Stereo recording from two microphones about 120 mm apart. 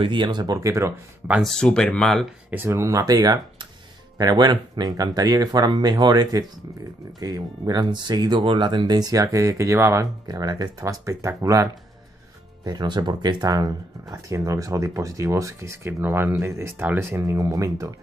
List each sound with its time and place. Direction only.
0.0 s speech: 40° right (ahead or behind); by 0.9 s 25° right (ahead or behind)
1.4 s speech: 5° left (ahead or behind)
2.5 s speech: 20° right (ahead or behind)
12.6 s speech: 35° right (ahead or behind)